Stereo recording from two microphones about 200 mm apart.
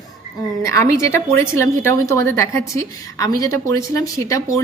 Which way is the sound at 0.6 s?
15° left (ahead or behind).